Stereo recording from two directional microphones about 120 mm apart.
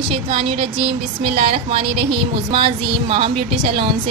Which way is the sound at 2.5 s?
45° right (ahead or behind).